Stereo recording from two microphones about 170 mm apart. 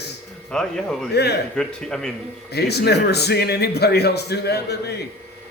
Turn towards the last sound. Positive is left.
turn(degrees=75)  # may be behind; listen again after turning